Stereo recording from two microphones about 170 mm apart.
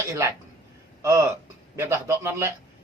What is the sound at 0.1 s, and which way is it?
Speech, 15° right (ahead or behind).